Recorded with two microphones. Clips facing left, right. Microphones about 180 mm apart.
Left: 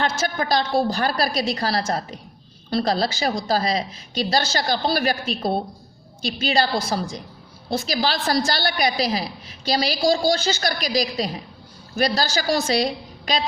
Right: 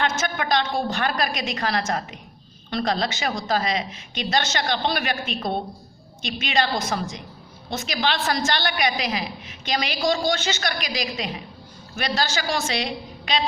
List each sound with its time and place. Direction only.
0.0 s a woman's voice: 35° left (ahead or behind)